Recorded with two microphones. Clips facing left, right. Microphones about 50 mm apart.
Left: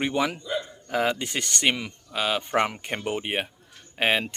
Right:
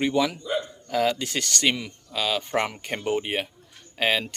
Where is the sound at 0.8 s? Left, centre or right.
Left.